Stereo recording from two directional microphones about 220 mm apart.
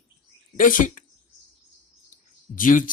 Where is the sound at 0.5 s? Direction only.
35° left (ahead or behind).